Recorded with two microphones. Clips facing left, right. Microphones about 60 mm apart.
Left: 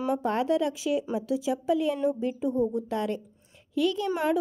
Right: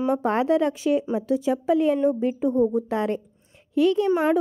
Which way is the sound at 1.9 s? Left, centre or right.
Right.